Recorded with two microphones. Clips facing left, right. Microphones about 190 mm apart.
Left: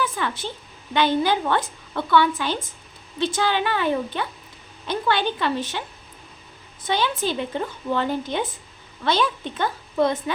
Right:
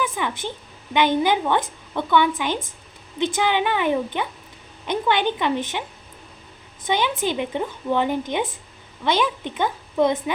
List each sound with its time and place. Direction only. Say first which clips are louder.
0.0 s a sound: right 1 dB; 15° right (ahead or behind)
0.9 s speech: right 1 dB; 15° right (ahead or behind)
6.8 s speech: right 1 dB; 15° right (ahead or behind)